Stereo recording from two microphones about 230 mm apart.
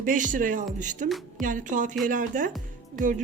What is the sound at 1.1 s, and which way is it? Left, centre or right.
Music, centre.